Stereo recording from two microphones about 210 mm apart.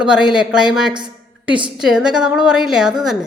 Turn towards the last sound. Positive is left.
turn(degrees=0)  # may be behind; listen again after turning